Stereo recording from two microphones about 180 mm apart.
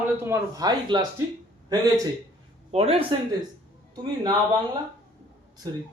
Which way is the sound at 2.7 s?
35° right (ahead or behind).